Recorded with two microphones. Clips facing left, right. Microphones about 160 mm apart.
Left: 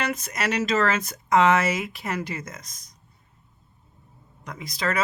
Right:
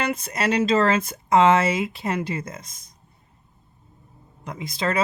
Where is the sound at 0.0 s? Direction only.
30° right (ahead or behind).